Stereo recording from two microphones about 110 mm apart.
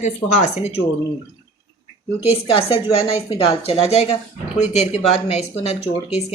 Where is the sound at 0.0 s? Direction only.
85° left.